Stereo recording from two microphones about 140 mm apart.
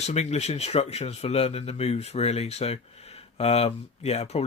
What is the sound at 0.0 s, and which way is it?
Speech, 50° left (ahead or behind).